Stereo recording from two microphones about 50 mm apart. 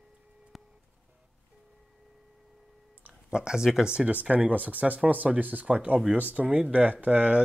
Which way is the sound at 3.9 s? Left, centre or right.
Right.